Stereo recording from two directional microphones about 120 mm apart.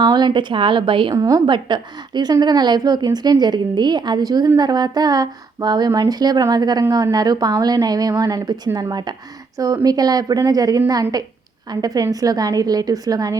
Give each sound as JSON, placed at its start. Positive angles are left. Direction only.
{"t": 0.0, "sound": "speech", "side_deg": -40}
{"t": 1.1, "sound": "a woman's voice", "side_deg": -30}